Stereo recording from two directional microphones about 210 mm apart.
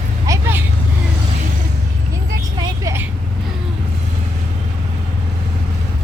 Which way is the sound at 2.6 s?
15° right (ahead or behind).